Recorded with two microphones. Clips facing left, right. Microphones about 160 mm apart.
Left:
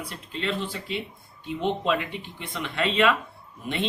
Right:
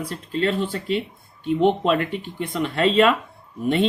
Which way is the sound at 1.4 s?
60° right (ahead or behind).